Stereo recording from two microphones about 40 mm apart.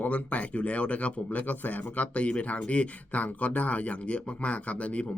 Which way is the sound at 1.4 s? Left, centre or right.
Left.